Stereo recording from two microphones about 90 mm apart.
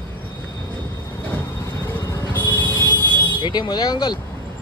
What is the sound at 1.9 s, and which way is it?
Music, 25° left (ahead or behind).